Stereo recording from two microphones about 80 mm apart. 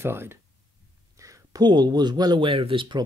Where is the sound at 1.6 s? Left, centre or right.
Right.